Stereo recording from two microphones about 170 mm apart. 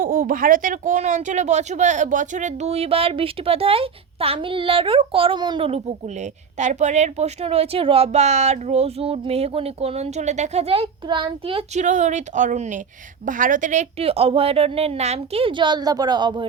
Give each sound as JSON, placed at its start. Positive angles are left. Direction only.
{"t": 0.0, "sound": "speech", "side_deg": -55}
{"t": 6.6, "sound": "speech", "side_deg": -45}